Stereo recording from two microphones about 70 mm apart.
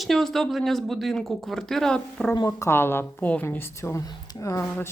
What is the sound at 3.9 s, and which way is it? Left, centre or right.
Speech, left.